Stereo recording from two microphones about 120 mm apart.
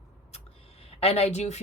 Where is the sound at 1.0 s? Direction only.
60° left (ahead or behind).